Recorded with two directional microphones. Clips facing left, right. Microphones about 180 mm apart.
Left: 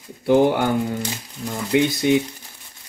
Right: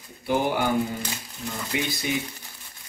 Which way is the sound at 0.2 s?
70° left (ahead or behind).